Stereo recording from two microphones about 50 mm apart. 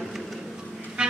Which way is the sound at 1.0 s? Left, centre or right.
Centre.